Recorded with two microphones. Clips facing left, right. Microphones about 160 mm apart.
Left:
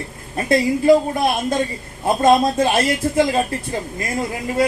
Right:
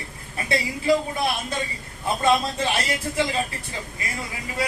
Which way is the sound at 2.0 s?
45° left (ahead or behind).